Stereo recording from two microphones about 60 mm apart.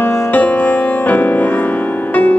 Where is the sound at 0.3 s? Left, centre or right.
Left.